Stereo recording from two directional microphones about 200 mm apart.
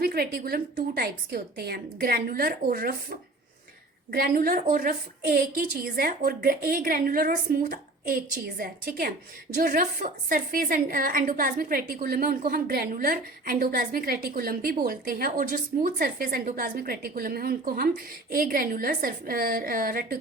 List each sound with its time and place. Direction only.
0.0 s speech: 50° right (ahead or behind)